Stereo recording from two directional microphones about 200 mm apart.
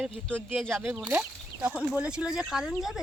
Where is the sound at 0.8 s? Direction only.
10° right (ahead or behind).